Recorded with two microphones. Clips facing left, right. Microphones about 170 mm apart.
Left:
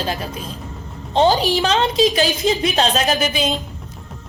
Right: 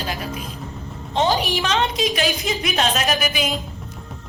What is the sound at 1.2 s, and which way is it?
A woman's voice, 35° left (ahead or behind).